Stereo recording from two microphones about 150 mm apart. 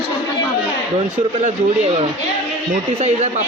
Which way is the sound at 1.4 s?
45° right (ahead or behind).